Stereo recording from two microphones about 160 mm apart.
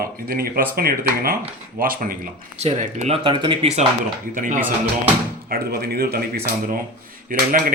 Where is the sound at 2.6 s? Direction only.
45° right (ahead or behind).